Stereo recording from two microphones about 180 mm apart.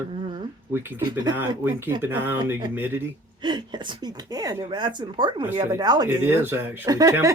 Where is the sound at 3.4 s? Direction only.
25° right (ahead or behind).